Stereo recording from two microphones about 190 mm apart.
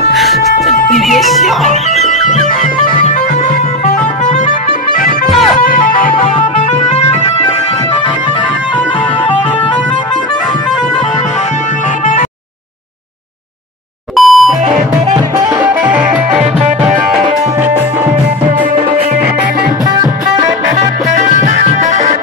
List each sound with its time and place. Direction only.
0.1 s music: centre (ahead or behind)
2.2 s music: 40° left (ahead or behind)
3.8 s music: 40° left (ahead or behind)
5.3 s music: centre (ahead or behind)
5.6 s music: 45° left (ahead or behind)
14.1 s music: centre (ahead or behind)
15.6 s music: 10° right (ahead or behind)
20.0 s music: 20° right (ahead or behind)
21.1 s music: 40° right (ahead or behind)